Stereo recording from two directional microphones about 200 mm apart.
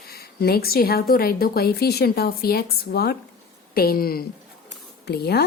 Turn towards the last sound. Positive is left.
turn(degrees=55)  # may be behind; listen again after turning